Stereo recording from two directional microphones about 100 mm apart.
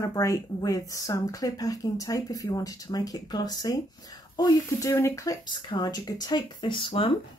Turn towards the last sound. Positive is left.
turn(degrees=65)  # may be behind; listen again after turning